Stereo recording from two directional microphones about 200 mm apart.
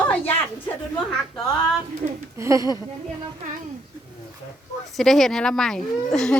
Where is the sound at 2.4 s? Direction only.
15° right (ahead or behind).